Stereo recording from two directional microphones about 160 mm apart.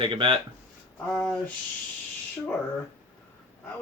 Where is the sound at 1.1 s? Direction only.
5° left (ahead or behind).